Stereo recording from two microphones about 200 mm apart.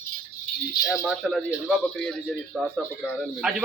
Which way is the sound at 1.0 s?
Centre (ahead or behind).